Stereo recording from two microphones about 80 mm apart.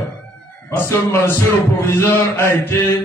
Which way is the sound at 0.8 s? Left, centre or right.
Left.